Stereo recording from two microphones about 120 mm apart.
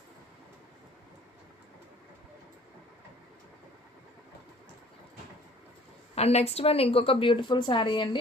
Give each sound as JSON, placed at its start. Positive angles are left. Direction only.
{"t": 6.1, "sound": "a woman's voice", "side_deg": 60}